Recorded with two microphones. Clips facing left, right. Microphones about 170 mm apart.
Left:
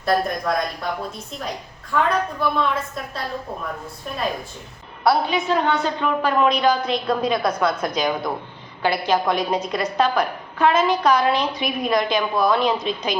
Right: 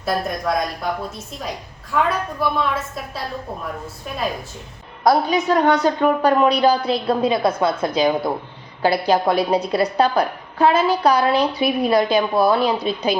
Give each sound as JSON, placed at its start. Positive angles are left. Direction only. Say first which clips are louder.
{"t": 0.0, "sound": "a woman's voice", "louder": "left 1 dB", "side_deg": 0}
{"t": 1.9, "sound": "a woman's voice", "louder": "even", "side_deg": -5}
{"t": 5.0, "sound": "a woman's voice", "louder": "right 3 dB", "side_deg": -40}
{"t": 12.5, "sound": "a woman's voice", "louder": "right 1 dB", "side_deg": -10}